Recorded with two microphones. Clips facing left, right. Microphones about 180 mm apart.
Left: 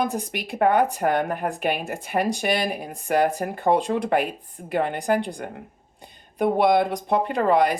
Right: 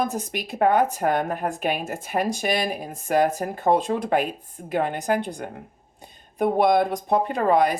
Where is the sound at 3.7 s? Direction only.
60° left (ahead or behind).